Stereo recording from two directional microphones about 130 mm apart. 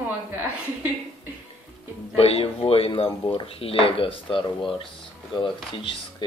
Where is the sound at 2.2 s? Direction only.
50° left (ahead or behind).